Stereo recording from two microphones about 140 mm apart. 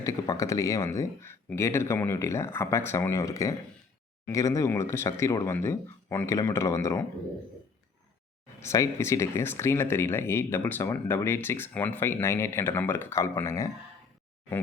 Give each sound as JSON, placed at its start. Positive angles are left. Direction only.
{"t": 0.0, "sound": "speech", "side_deg": 25}
{"t": 8.6, "sound": "speech", "side_deg": 20}